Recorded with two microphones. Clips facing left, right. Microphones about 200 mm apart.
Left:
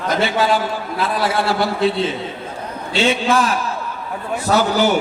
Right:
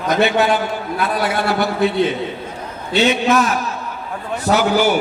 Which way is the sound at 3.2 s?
30° left (ahead or behind).